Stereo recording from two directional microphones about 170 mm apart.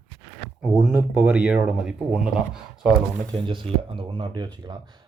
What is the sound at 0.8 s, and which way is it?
Speech, 5° right (ahead or behind).